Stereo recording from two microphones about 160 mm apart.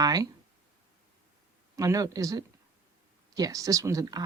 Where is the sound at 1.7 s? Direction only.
20° right (ahead or behind).